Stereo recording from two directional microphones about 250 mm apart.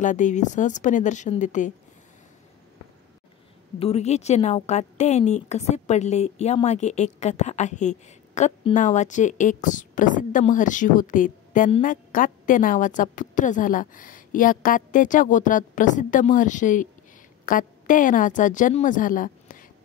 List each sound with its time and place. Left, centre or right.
0.0 s a woman's voice: left
3.8 s a woman's voice: left